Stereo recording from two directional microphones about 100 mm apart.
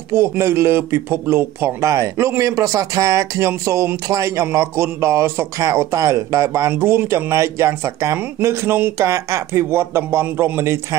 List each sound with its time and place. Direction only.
0.1 s speech: 25° right (ahead or behind)
8.9 s speech: 30° right (ahead or behind)